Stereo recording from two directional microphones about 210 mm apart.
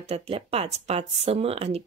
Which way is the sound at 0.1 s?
30° right (ahead or behind).